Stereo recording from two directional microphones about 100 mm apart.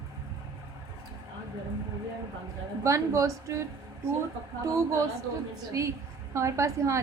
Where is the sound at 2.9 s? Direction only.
30° right (ahead or behind).